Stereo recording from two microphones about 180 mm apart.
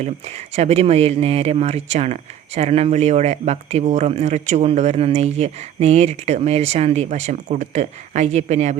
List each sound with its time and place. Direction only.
0.5 s speech: 35° right (ahead or behind)